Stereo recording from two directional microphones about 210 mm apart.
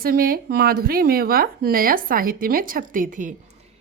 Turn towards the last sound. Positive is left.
turn(degrees=-40)  # may be behind; listen again after turning